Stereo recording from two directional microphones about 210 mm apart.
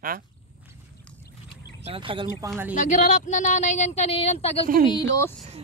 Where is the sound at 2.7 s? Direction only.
35° left (ahead or behind).